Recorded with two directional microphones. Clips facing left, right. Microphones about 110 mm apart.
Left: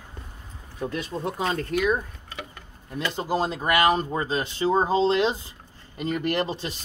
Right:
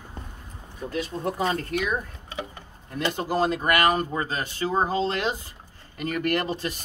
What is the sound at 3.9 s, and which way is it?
Speech, 25° left (ahead or behind).